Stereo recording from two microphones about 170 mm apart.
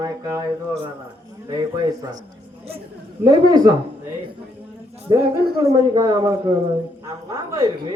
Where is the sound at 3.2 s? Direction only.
25° right (ahead or behind).